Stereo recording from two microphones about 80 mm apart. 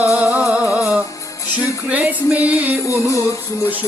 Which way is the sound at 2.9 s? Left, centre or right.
Left.